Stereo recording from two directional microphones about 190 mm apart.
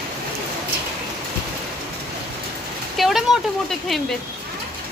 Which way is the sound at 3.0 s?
Centre (ahead or behind).